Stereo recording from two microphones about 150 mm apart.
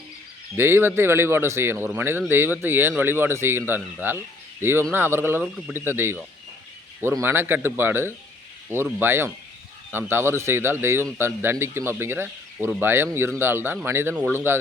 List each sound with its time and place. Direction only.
0.5 s speech: 15° right (ahead or behind)
4.6 s speech: 15° right (ahead or behind)